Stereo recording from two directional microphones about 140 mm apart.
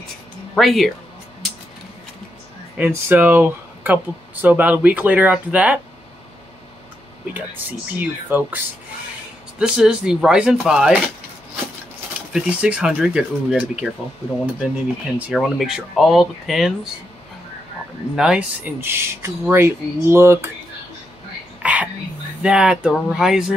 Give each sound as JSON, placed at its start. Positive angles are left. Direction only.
{"t": 0.6, "sound": "speech", "side_deg": 0}
{"t": 2.8, "sound": "speech", "side_deg": -15}
{"t": 7.3, "sound": "speech", "side_deg": -10}
{"t": 9.6, "sound": "speech", "side_deg": -5}
{"t": 12.3, "sound": "speech", "side_deg": -5}
{"t": 15.1, "sound": "speech", "side_deg": -5}
{"t": 18.1, "sound": "speech", "side_deg": -5}
{"t": 21.6, "sound": "whispering", "side_deg": -10}
{"t": 22.4, "sound": "speech", "side_deg": -5}